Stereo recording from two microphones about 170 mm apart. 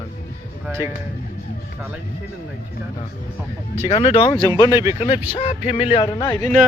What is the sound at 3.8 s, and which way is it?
Speech, 35° left (ahead or behind).